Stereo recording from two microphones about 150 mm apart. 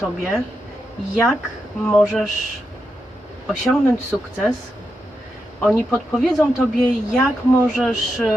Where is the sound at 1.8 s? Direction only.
Centre (ahead or behind).